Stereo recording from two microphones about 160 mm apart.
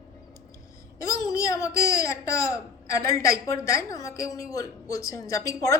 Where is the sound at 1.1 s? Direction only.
20° left (ahead or behind).